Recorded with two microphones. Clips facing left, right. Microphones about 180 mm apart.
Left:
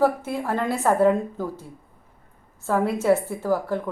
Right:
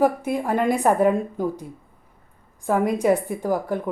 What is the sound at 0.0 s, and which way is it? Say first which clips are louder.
A woman's voice: right 1 dB; 15° right (ahead or behind).